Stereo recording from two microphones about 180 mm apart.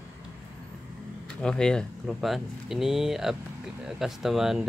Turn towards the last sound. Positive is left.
turn(degrees=0)  # may be behind; listen again after turning